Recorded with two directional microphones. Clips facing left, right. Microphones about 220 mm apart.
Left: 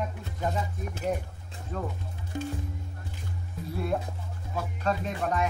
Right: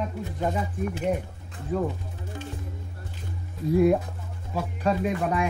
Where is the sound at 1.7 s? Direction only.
5° right (ahead or behind).